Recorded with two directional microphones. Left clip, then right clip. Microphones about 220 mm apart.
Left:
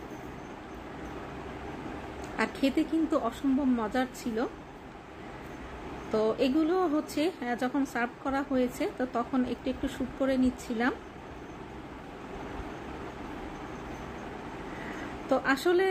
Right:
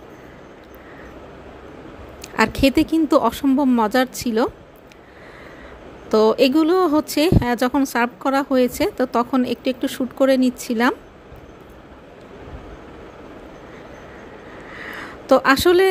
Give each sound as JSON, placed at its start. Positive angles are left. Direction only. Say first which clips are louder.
{"t": 2.2, "sound": "a woman's voice", "louder": "right 13 dB", "side_deg": -50}
{"t": 6.1, "sound": "a woman's voice", "louder": "right 12 dB", "side_deg": -50}
{"t": 15.2, "sound": "a woman's voice", "louder": "right 13 dB", "side_deg": -50}